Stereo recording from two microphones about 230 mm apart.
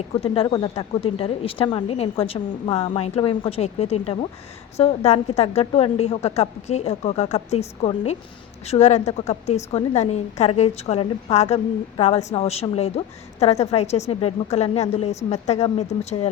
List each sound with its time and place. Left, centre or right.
0.2 s a woman's voice: left